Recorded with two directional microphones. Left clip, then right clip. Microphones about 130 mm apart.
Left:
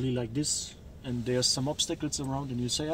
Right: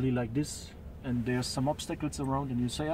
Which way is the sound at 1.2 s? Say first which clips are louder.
Left 4 dB; 20° right (ahead or behind).